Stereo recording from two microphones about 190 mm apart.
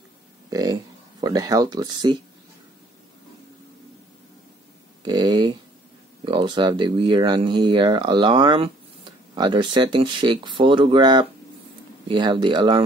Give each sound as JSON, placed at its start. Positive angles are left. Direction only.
{"t": 0.5, "sound": "speech", "side_deg": -20}
{"t": 5.0, "sound": "speech", "side_deg": -20}